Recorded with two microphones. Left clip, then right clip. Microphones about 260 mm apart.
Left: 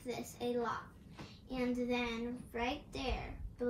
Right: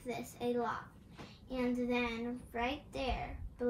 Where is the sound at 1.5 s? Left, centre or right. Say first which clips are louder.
Right 1 dB; centre.